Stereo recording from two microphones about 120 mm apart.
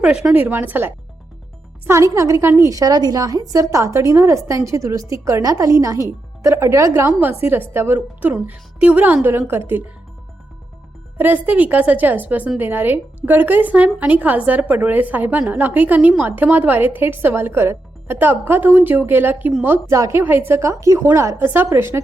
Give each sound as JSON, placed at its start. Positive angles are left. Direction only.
{"t": 0.0, "sound": "a woman's voice", "side_deg": -10}
{"t": 11.2, "sound": "a woman's voice", "side_deg": -15}